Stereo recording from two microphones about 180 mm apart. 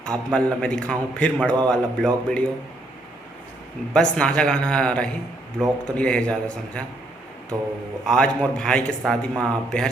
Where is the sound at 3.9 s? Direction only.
5° left (ahead or behind).